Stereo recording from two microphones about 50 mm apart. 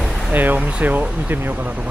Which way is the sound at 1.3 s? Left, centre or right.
Right.